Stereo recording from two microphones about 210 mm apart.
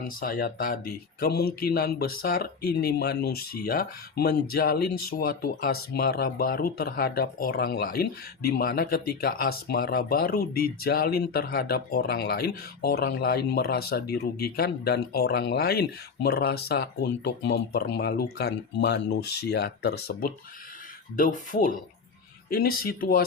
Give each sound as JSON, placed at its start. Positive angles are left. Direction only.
{"t": 0.2, "sound": "speech", "side_deg": 45}